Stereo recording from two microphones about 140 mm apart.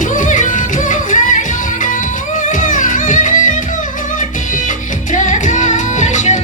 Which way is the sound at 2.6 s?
65° left (ahead or behind).